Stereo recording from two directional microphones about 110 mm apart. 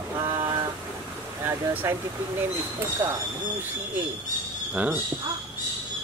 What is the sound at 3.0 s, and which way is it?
Speech, 35° right (ahead or behind).